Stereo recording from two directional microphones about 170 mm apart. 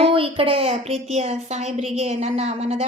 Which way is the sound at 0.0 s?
30° right (ahead or behind).